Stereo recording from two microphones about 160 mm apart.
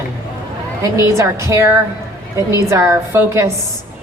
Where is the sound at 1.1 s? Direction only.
20° right (ahead or behind).